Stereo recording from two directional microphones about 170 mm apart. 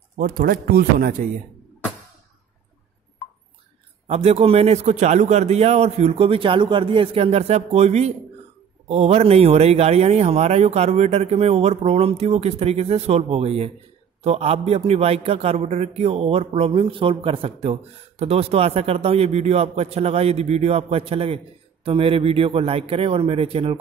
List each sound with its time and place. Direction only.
0.2 s a man's voice: 60° right (ahead or behind)
4.1 s a man's voice: 40° right (ahead or behind)